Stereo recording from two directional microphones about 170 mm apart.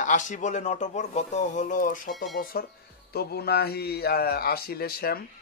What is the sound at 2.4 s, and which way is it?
Speech, 60° left (ahead or behind).